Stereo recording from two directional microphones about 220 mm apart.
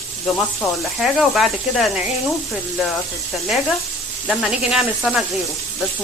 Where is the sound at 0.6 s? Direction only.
Centre (ahead or behind).